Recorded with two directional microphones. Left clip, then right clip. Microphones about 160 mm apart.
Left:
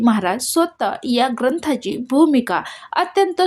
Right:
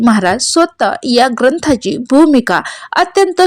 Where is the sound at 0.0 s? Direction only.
45° right (ahead or behind).